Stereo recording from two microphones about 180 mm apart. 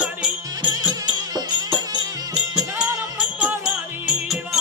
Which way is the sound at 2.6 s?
5° right (ahead or behind).